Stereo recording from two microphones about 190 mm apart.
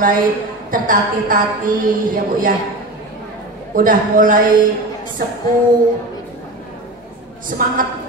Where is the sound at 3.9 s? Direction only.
45° right (ahead or behind).